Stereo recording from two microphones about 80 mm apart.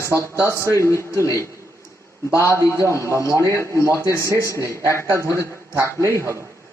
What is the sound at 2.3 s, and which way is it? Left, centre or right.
A man's voice, left.